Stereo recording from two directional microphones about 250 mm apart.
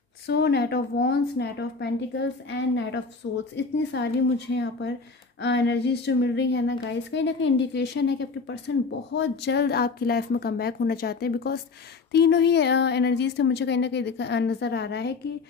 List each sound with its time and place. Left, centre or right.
0.3 s a woman's voice: left